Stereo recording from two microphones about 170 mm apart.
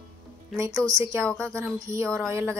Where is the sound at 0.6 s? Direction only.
20° right (ahead or behind).